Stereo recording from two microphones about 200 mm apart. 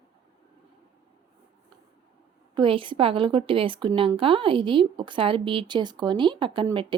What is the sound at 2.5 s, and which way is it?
A woman's voice, 25° right (ahead or behind).